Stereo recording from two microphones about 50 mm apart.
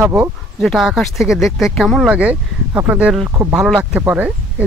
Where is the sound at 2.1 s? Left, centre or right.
Right.